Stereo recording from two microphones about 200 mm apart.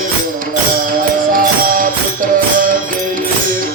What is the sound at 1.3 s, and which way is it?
Music, 40° right (ahead or behind).